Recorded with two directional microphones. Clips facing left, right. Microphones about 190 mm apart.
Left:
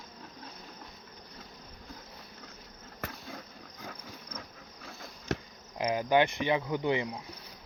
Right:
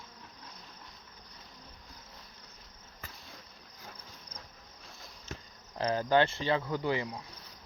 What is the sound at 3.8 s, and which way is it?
Cricket, 90° left.